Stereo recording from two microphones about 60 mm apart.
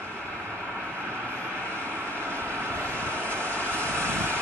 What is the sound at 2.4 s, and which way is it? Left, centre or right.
Vehicle, right.